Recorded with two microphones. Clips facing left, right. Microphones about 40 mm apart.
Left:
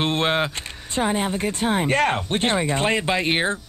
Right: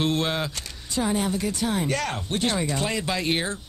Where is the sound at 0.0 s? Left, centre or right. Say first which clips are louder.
Left 4 dB; left.